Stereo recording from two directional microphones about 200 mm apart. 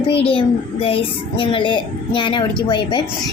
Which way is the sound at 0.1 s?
30° left (ahead or behind).